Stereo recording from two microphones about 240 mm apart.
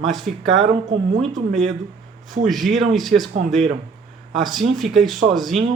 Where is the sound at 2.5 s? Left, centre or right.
Centre.